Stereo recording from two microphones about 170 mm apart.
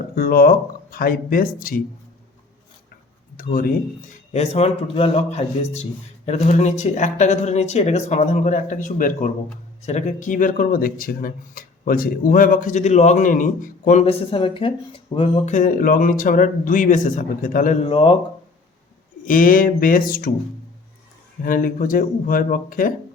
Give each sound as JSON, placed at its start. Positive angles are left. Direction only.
{"t": 0.2, "sound": "speech", "side_deg": 60}
{"t": 3.3, "sound": "speech", "side_deg": 55}
{"t": 4.1, "sound": "speech", "side_deg": 40}
{"t": 15.4, "sound": "speech", "side_deg": 50}
{"t": 17.8, "sound": "speech", "side_deg": 35}
{"t": 19.2, "sound": "speech", "side_deg": 55}
{"t": 21.4, "sound": "speech", "side_deg": 55}